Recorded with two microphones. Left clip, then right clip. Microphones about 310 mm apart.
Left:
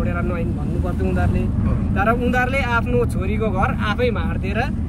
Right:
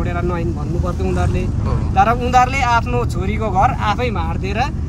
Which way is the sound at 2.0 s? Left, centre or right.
Centre.